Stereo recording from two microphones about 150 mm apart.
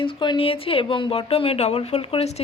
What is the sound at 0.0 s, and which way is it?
A woman's voice, 35° left (ahead or behind).